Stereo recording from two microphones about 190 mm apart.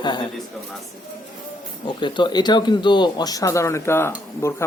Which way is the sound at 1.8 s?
25° left (ahead or behind).